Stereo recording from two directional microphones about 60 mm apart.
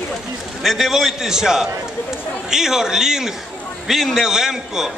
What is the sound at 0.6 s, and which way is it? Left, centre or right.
A man's voice, centre.